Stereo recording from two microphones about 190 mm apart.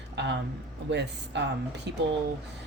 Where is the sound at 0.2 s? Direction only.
65° right (ahead or behind).